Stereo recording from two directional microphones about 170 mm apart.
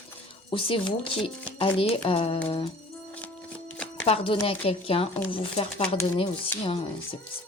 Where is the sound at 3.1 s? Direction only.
5° left (ahead or behind).